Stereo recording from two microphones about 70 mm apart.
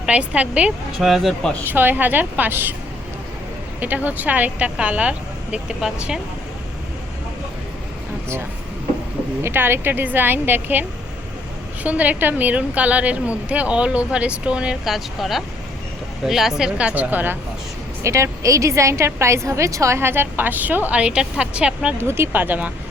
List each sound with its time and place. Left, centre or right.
0.0 s a woman's voice: centre
0.9 s speech: centre
1.6 s a woman's voice: right
3.8 s a woman's voice: right
9.4 s a woman's voice: right; by 16.7 s centre
16.7 s a woman's voice: centre
18.0 s a woman's voice: right
20.0 s a woman's voice: right
20.9 s a woman's voice: centre
22.0 s a woman's voice: right